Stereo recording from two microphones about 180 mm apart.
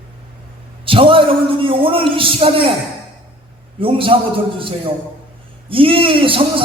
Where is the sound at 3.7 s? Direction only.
30° right (ahead or behind).